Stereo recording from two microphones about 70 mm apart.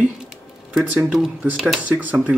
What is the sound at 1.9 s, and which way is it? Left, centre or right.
Speech, right.